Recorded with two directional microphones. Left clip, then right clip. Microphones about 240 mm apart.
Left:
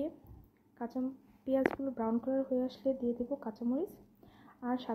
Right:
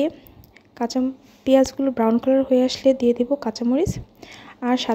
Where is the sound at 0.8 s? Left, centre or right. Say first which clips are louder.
Right 15 dB; right.